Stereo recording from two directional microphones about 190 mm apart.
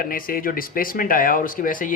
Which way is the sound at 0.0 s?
50° left (ahead or behind).